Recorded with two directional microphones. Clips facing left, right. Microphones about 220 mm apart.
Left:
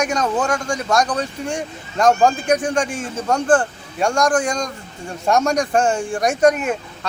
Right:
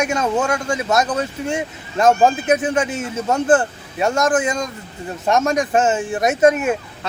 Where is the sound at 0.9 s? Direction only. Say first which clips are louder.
Left 1 dB; 5° right (ahead or behind).